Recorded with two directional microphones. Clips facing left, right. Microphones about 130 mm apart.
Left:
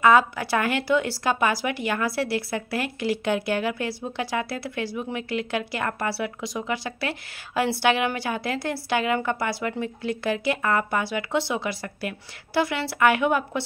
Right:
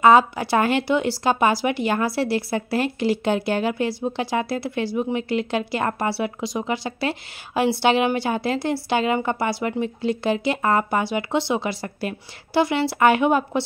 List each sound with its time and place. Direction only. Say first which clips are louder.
0.0 s speech: right 3 dB; 25° right (ahead or behind)